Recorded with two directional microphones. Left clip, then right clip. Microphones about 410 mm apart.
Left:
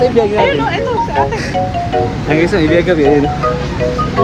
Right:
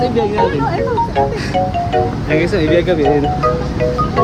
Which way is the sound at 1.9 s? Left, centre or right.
Centre.